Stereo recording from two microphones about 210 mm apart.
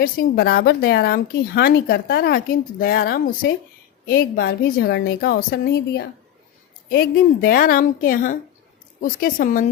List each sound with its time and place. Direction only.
0.0 s a woman's voice: 45° left (ahead or behind)